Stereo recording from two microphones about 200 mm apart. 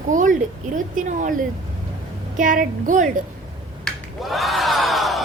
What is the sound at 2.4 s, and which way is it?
Speech, 40° right (ahead or behind).